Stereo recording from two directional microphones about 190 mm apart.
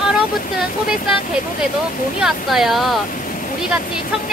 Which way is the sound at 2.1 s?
Centre (ahead or behind).